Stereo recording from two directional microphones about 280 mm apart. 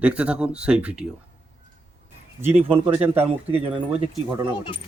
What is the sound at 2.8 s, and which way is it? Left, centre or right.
Speech, centre.